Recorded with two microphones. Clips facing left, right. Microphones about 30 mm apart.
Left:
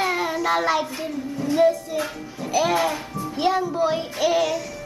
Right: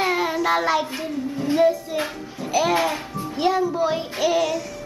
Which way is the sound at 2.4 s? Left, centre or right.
Centre.